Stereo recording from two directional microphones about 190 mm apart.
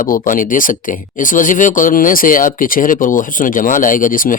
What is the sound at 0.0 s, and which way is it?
A man's voice, 45° left (ahead or behind).